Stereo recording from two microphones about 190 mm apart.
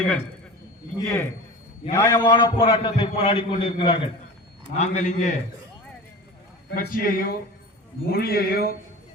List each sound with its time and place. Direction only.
0.9 s a man's voice: 15° left (ahead or behind)
4.8 s a man's voice: 40° left (ahead or behind)
6.7 s a man's voice: 50° left (ahead or behind)